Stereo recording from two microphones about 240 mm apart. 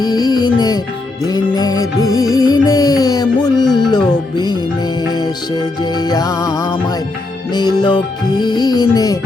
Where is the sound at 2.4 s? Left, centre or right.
Centre.